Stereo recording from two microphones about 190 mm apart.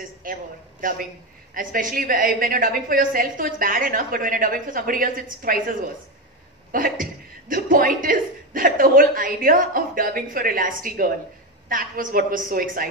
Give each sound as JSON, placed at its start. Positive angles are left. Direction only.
{"t": 0.2, "sound": "a man's voice", "side_deg": -45}